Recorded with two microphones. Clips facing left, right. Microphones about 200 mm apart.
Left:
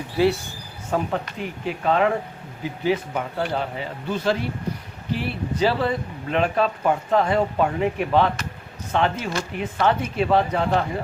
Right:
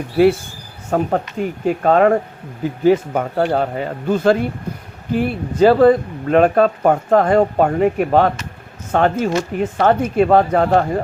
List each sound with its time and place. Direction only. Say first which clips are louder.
0.9 s speech: right 6 dB; 45° right (ahead or behind)